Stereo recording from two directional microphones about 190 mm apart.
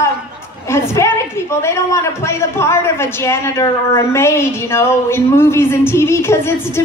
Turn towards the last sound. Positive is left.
turn(degrees=15)  # may be behind; listen again after turning